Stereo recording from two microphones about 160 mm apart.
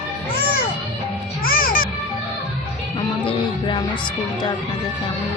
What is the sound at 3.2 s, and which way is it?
Music, 30° left (ahead or behind).